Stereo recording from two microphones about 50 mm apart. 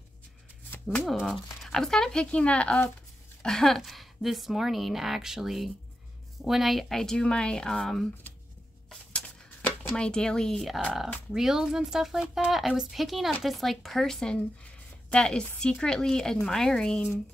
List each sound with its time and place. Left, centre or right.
1.2 s speech: centre
2.3 s speech: left
3.4 s a woman's voice: centre
9.1 s a sound: left
11.3 s a woman's voice: centre
14.6 s a sound: centre
15.7 s speech: centre